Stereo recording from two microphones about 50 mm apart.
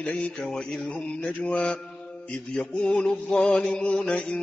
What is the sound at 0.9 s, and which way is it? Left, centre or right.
Mantra, left.